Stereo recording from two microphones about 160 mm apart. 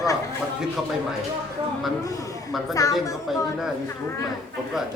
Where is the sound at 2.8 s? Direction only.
20° left (ahead or behind).